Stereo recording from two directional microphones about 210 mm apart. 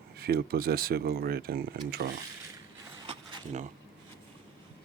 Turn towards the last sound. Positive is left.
turn(degrees=-30)  # may be behind; listen again after turning